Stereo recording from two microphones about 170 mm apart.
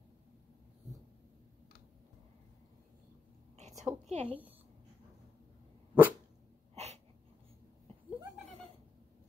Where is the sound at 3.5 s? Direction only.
40° right (ahead or behind).